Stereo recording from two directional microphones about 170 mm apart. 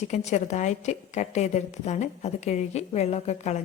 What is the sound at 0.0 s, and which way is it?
A woman's voice, 40° left (ahead or behind).